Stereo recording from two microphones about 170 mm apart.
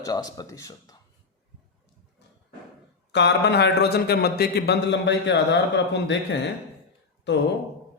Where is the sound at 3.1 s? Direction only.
85° left.